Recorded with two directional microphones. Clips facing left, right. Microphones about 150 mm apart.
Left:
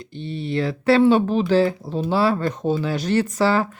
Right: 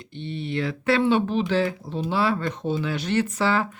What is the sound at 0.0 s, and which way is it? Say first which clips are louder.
Speech: left 3 dB; 35° left (ahead or behind).